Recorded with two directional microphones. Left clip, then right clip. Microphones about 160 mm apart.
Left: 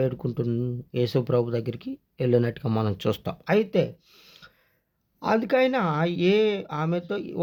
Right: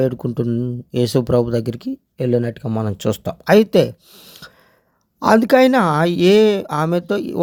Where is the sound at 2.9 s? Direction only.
30° right (ahead or behind).